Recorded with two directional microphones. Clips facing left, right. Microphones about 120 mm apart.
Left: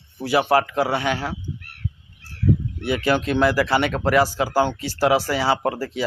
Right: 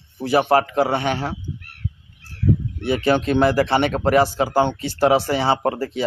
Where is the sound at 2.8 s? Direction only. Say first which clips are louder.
Right 5 dB; 25° right (ahead or behind).